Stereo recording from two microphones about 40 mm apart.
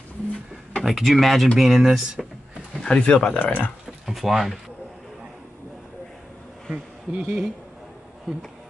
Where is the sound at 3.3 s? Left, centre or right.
Left.